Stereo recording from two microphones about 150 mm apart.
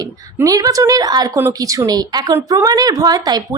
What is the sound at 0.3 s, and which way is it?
A woman's voice, 25° right (ahead or behind).